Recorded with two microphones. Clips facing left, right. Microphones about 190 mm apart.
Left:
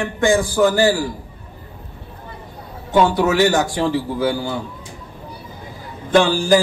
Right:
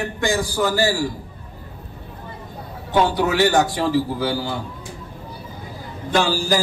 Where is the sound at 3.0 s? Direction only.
45° left (ahead or behind).